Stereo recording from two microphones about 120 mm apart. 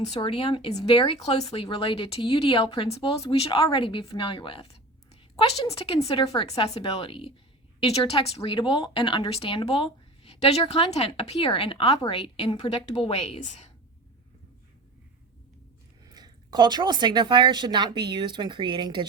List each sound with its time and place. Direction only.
0.0 s speech: 50° left (ahead or behind); by 13.7 s 75° left (ahead or behind)
16.0 s speech: 35° right (ahead or behind)